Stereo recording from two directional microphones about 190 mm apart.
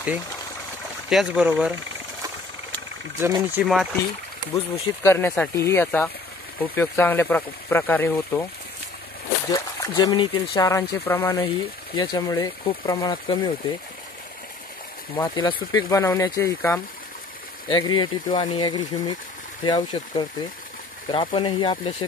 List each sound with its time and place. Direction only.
1.1 s speech: 5° right (ahead or behind)
3.2 s speech: 15° right (ahead or behind)
3.6 s speech: centre (ahead or behind)
5.0 s speech: 10° left (ahead or behind)
9.5 s speech: 20° left (ahead or behind)
11.4 s speech: 25° left (ahead or behind)
15.1 s speech: 20° left (ahead or behind)